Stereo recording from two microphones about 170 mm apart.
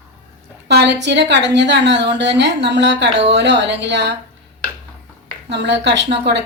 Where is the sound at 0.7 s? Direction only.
85° right.